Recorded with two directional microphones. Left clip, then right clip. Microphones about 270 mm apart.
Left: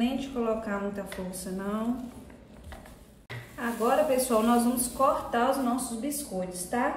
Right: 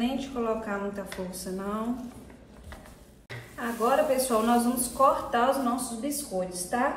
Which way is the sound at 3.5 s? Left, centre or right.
Centre.